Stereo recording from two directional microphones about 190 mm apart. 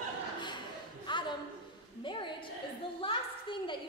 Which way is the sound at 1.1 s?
25° left (ahead or behind).